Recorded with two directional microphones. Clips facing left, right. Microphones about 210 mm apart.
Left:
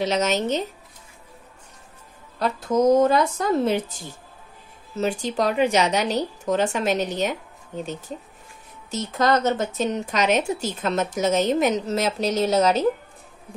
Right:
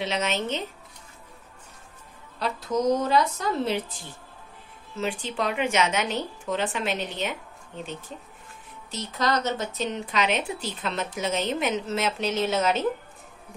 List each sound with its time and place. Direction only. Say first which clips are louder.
0.0 s a woman's voice: left 5 dB; 40° left (ahead or behind)
2.3 s speech: left 5 dB; 50° left (ahead or behind)
4.9 s a woman's voice: left 5 dB; 40° left (ahead or behind)
8.9 s speech: left 5 dB; 50° left (ahead or behind)